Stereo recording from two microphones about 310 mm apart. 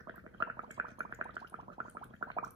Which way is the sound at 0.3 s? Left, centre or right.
Centre.